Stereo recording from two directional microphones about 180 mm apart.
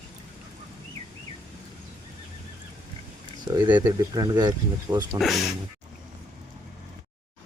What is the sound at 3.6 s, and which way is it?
Speech, 10° right (ahead or behind).